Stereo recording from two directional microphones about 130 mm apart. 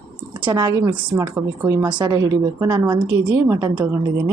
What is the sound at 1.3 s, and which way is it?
Speech, 20° right (ahead or behind).